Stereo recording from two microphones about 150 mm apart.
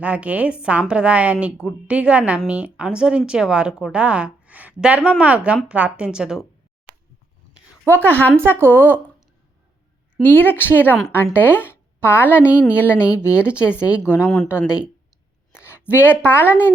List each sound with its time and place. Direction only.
0.0 s a woman's voice: 10° right (ahead or behind)
7.5 s a sound: 15° right (ahead or behind)
8.0 s a woman's voice: 10° left (ahead or behind)
8.5 s a woman's voice: 15° right (ahead or behind)
10.2 s a woman's voice: 10° left (ahead or behind)
15.5 s a woman's voice: 15° left (ahead or behind)